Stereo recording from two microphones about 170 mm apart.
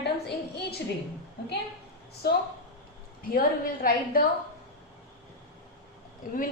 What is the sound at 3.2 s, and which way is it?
A woman's voice, 60° left (ahead or behind).